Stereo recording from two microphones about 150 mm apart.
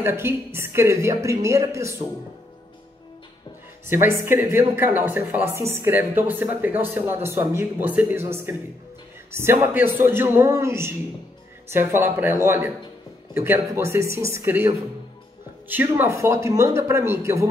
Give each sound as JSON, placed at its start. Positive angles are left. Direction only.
{"t": 0.0, "sound": "a woman's voice", "side_deg": -15}
{"t": 3.8, "sound": "speech", "side_deg": -15}
{"t": 15.7, "sound": "a woman's voice", "side_deg": -15}